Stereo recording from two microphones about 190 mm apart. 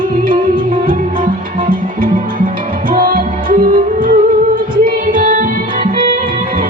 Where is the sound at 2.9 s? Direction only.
45° right (ahead or behind).